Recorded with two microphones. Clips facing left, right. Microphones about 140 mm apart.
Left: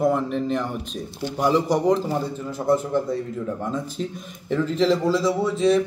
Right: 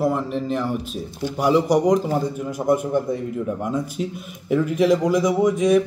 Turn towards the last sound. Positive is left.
turn(degrees=-15)  # may be behind; listen again after turning